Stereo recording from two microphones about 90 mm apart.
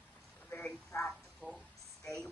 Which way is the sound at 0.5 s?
15° left (ahead or behind).